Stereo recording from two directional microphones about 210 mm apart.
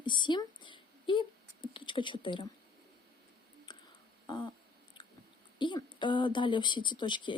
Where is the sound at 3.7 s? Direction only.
20° left (ahead or behind).